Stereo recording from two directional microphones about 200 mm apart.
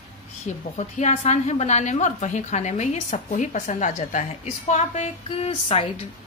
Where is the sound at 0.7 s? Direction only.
35° left (ahead or behind).